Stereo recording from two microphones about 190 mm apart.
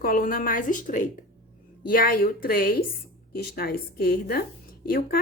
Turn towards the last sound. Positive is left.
turn(degrees=50)  # may be behind; listen again after turning